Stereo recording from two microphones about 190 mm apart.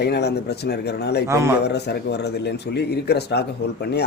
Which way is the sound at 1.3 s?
15° right (ahead or behind).